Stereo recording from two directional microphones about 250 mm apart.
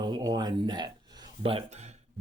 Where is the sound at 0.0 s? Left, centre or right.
Centre.